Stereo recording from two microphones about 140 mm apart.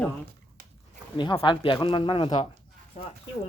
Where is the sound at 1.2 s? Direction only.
35° left (ahead or behind).